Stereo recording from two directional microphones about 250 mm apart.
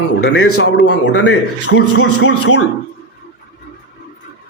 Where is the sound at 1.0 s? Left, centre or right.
Left.